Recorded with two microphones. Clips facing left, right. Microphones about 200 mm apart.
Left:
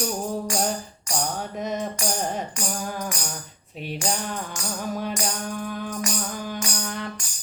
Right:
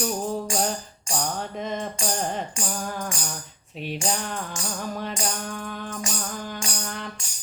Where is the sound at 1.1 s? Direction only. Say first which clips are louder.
Even; 25° right (ahead or behind).